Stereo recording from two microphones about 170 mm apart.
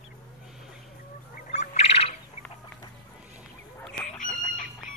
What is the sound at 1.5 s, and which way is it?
Bird, 40° left (ahead or behind).